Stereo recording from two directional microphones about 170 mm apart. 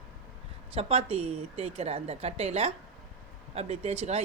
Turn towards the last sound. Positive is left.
turn(degrees=-35)  # may be behind; listen again after turning